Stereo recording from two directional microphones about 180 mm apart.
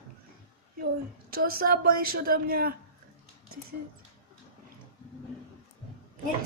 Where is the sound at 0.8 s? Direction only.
55° right (ahead or behind).